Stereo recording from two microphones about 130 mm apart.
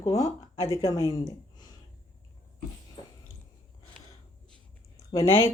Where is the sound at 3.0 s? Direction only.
45° left (ahead or behind).